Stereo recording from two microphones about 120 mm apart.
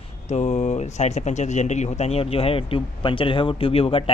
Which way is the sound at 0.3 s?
75° left (ahead or behind).